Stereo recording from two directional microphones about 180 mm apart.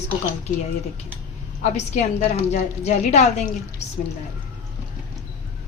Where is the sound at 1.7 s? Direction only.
40° left (ahead or behind).